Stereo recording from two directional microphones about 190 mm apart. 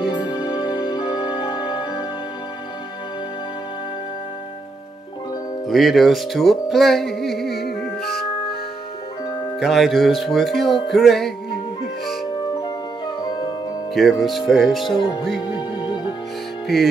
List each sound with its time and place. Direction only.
0.0 s music: 25° left (ahead or behind)
5.7 s music: centre (ahead or behind)
7.4 s music: 60° left (ahead or behind)
9.6 s music: centre (ahead or behind)
12.6 s music: 25° left (ahead or behind)
13.9 s music: centre (ahead or behind)
16.6 s music: centre (ahead or behind)